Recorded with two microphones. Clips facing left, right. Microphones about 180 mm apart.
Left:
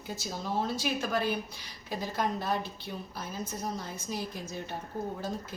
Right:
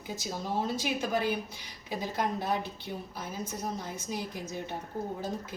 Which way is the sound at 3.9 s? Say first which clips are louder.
Even; 20° right (ahead or behind).